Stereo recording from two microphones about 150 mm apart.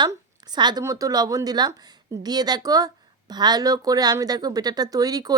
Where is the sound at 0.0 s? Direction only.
30° right (ahead or behind).